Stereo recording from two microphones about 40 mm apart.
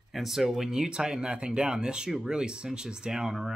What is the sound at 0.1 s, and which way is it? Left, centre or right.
Speech, centre.